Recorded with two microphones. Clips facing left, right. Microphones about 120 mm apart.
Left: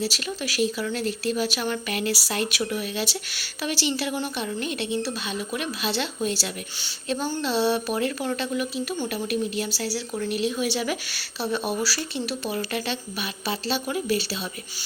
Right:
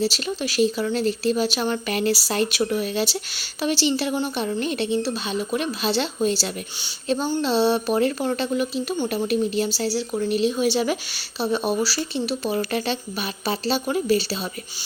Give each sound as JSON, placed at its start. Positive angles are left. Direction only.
{"t": 0.0, "sound": "speech", "side_deg": -25}